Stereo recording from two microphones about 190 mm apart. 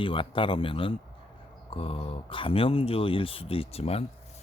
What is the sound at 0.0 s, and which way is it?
Speech, 25° left (ahead or behind).